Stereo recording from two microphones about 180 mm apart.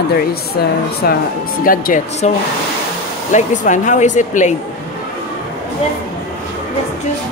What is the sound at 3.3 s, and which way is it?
Speech, 45° left (ahead or behind).